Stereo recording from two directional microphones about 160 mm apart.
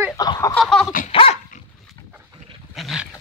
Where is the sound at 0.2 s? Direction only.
25° left (ahead or behind).